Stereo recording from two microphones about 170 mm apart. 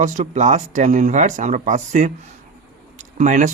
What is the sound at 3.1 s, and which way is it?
Speech, 45° right (ahead or behind).